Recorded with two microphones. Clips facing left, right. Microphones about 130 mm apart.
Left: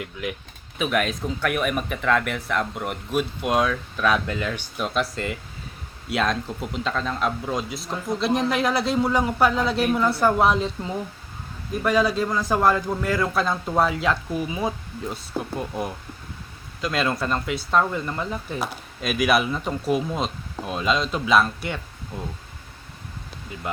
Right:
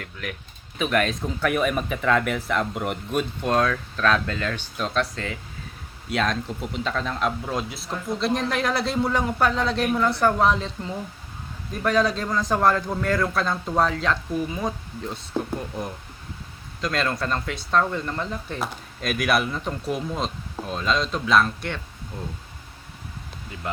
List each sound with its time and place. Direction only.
0.0 s speech: 15° left (ahead or behind)
0.8 s speech: 5° left (ahead or behind)
11.7 s speech: 5° left (ahead or behind)
16.8 s speech: 5° left (ahead or behind)